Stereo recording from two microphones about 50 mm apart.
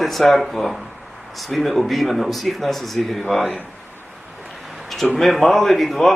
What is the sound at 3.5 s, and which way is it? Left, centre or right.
Speech, left.